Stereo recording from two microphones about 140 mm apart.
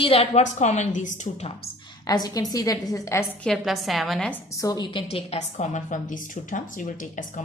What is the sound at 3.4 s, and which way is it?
Speech, centre (ahead or behind).